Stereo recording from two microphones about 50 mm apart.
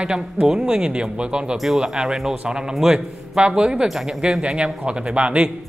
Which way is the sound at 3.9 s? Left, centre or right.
Centre.